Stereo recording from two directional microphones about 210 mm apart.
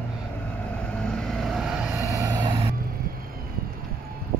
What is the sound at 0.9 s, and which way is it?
Vehicle, 5° left (ahead or behind).